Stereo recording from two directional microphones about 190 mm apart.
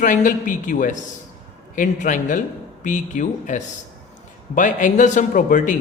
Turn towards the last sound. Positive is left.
turn(degrees=45)  # may be behind; listen again after turning